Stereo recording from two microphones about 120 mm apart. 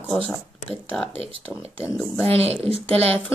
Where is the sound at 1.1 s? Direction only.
55° right (ahead or behind).